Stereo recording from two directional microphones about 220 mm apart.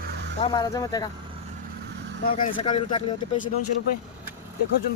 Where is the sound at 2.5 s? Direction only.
25° left (ahead or behind).